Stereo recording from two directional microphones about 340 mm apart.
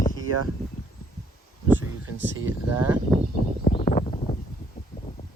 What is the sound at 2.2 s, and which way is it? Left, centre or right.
Speech, right.